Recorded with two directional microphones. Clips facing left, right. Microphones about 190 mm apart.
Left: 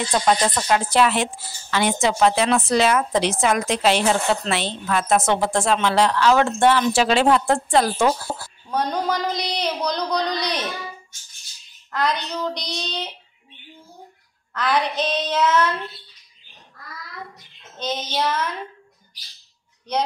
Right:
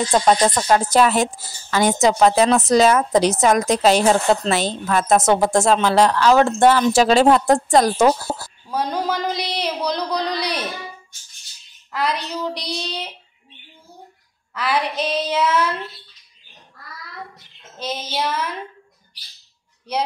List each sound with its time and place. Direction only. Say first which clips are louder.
0.1 s speech: right 3 dB; 35° right (ahead or behind)
8.6 s speech: even; 5° right (ahead or behind)
11.9 s a woman's voice: even; 5° right (ahead or behind)
14.5 s speech: even; 5° right (ahead or behind)
17.7 s speech: left 1 dB; 5° right (ahead or behind)